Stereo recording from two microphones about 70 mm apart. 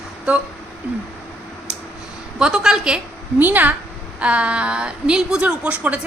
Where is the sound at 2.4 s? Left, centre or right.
Centre.